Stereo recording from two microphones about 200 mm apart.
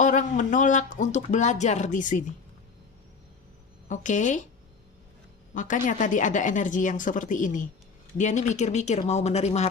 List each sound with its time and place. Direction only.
0.0 s speech: 40° left (ahead or behind)
3.8 s speech: 40° left (ahead or behind)
5.5 s speech: 40° left (ahead or behind)